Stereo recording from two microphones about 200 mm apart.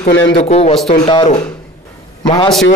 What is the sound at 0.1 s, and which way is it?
Speech, 75° left (ahead or behind).